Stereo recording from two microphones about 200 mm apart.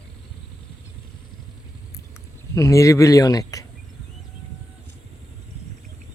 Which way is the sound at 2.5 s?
15° left (ahead or behind).